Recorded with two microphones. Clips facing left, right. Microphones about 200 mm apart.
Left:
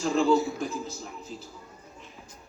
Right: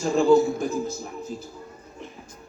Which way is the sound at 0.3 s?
45° right (ahead or behind).